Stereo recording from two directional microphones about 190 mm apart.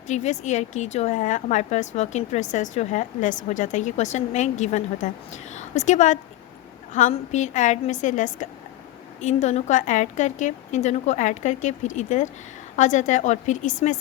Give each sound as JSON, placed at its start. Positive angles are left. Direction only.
{"t": 0.1, "sound": "a woman's voice", "side_deg": 35}